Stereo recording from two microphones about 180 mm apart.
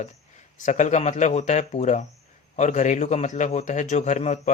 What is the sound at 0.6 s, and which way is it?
Speech, 40° left (ahead or behind).